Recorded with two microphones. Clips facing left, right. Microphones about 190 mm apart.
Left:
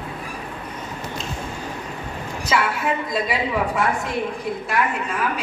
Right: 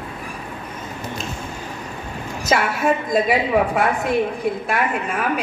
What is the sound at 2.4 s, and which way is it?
A woman's voice, 45° right (ahead or behind).